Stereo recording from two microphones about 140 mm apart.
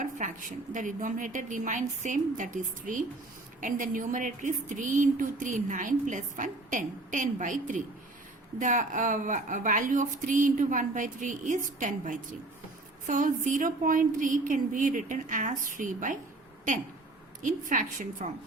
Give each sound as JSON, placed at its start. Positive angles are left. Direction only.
{"t": 0.2, "sound": "a sound", "side_deg": -60}
{"t": 0.7, "sound": "a woman's voice", "side_deg": -70}
{"t": 17.4, "sound": "speech", "side_deg": -65}